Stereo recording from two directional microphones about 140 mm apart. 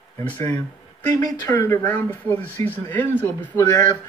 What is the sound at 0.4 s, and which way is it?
Speech, 25° left (ahead or behind).